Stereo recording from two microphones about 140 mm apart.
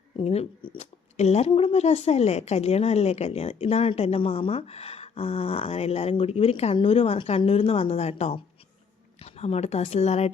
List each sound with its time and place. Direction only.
0.2 s speech: 45° left (ahead or behind)